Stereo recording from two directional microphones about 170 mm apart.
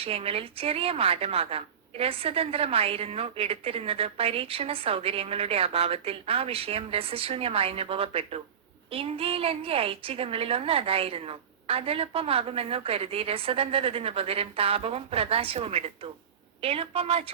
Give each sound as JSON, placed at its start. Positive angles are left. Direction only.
{"t": 0.0, "sound": "a woman's voice", "side_deg": -35}